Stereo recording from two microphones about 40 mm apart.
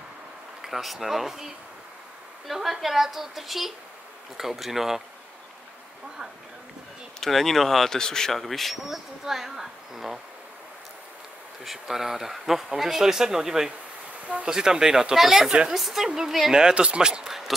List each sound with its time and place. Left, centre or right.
0.6 s speech: centre
7.2 s speech: centre
8.4 s speech: centre
11.6 s speech: centre
14.2 s speech: right
14.5 s speech: centre
16.5 s speech: right
17.3 s a sound: centre